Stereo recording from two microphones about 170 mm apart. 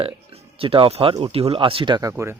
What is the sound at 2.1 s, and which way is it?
Speech, 15° right (ahead or behind).